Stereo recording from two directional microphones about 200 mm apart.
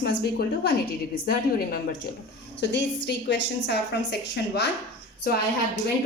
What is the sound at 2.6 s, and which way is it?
A woman's voice, 60° left (ahead or behind).